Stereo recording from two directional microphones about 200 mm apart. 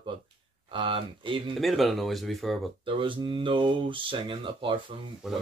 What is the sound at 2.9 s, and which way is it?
Speech, 25° right (ahead or behind).